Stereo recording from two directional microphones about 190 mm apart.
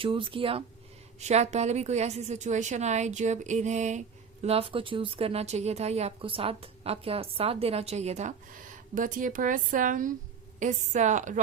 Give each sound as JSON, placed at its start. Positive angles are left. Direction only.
{"t": 0.0, "sound": "speech", "side_deg": -25}